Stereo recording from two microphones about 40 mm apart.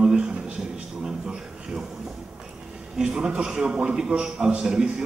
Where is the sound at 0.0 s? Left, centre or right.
Right.